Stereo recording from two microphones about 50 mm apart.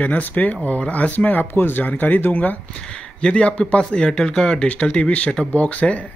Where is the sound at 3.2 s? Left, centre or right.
Centre.